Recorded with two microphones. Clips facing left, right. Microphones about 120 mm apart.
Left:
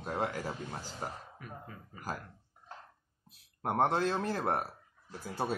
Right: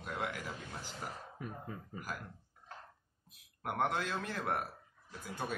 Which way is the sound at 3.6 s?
35° left (ahead or behind).